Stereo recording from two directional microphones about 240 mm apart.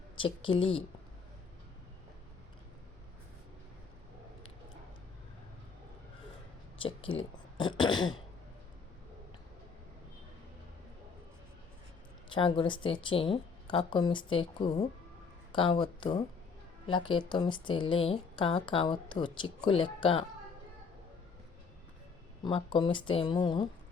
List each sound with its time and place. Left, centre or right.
0.2 s speech: left
6.7 s speech: left
7.2 s a sound: centre
12.3 s speech: left
22.4 s speech: centre